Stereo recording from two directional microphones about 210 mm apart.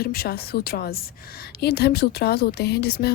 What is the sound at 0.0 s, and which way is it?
A woman's voice, 45° left (ahead or behind).